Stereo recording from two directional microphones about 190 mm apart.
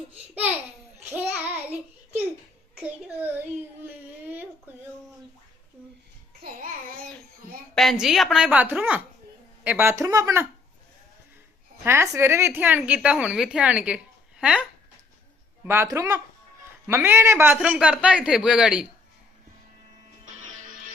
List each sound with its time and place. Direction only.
0.9 s child singing: 10° right (ahead or behind)
2.8 s a woman's voice: 10° right (ahead or behind)
3.8 s a sound: 10° right (ahead or behind)
6.4 s babbling: 50° right (ahead or behind)
7.8 s a woman's voice: centre (ahead or behind); by 10.4 s 15° right (ahead or behind)
11.9 s a woman's voice: 15° right (ahead or behind)
15.6 s a woman's voice: 15° right (ahead or behind)